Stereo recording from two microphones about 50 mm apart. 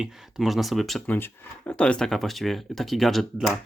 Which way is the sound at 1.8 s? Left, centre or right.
Left.